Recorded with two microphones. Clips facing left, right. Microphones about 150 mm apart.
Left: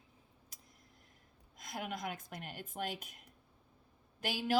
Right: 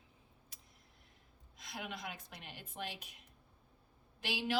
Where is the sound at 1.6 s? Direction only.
45° left (ahead or behind).